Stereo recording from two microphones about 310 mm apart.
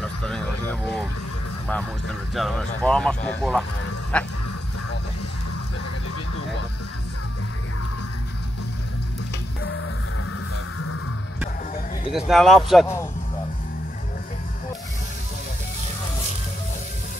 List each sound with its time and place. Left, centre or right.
0.0 s a sound: centre
2.3 s speech: centre
9.6 s music: left
12.1 s speech: centre